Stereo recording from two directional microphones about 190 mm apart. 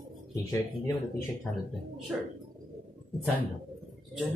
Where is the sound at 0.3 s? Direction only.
20° left (ahead or behind).